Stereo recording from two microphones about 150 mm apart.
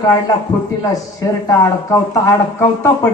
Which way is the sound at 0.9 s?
25° left (ahead or behind).